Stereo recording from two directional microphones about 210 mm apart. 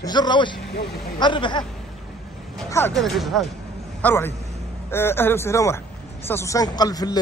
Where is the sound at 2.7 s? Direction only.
10° left (ahead or behind).